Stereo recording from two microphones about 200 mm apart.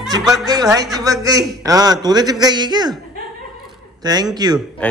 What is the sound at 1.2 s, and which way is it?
A man's voice, 15° right (ahead or behind).